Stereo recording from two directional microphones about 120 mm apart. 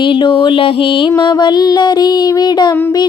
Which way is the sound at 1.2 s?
40° left (ahead or behind).